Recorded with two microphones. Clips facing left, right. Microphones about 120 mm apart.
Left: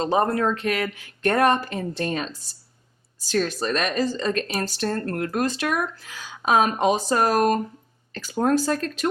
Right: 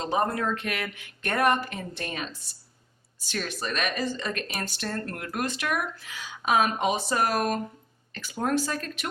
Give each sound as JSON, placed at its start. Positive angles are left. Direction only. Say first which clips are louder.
{"t": 0.0, "sound": "speech", "louder": "left 5 dB", "side_deg": 35}
{"t": 3.3, "sound": "speech", "louder": "left 8 dB", "side_deg": 40}